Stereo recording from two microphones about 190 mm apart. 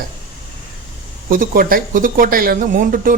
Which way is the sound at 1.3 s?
50° right (ahead or behind).